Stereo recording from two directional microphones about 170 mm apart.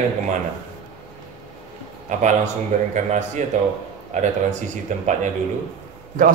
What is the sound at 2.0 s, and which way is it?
A man's voice, 45° right (ahead or behind).